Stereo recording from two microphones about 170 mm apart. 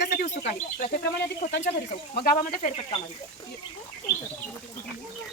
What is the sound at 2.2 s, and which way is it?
Speech, 55° left (ahead or behind).